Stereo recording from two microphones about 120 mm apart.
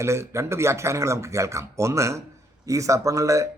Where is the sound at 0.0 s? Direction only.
25° right (ahead or behind).